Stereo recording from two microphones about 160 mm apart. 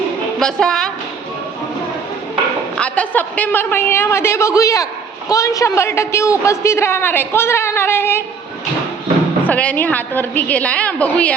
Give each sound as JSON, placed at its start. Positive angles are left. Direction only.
{"t": 0.3, "sound": "a woman's voice", "side_deg": 5}
{"t": 2.7, "sound": "a man's voice", "side_deg": 10}
{"t": 9.5, "sound": "a man's voice", "side_deg": 10}